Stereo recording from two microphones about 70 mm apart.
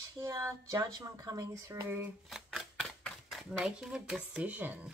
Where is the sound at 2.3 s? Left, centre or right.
Centre.